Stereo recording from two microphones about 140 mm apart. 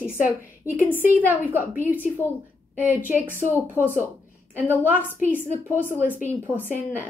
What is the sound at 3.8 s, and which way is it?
A woman's voice, 15° right (ahead or behind).